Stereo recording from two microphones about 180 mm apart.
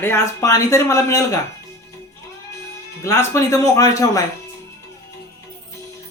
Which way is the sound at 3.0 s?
15° left (ahead or behind).